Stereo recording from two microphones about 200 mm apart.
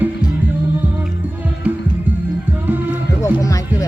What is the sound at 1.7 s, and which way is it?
Music, 10° right (ahead or behind).